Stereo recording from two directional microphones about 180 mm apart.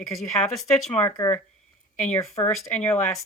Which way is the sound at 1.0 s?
15° left (ahead or behind).